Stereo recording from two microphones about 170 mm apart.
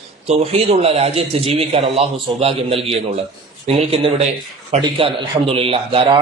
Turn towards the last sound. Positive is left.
turn(degrees=-30)  # may be behind; listen again after turning